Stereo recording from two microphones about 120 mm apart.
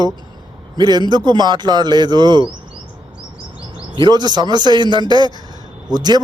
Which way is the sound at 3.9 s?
35° right (ahead or behind).